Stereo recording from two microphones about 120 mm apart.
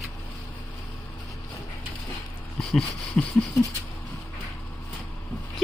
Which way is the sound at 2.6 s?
Centre (ahead or behind).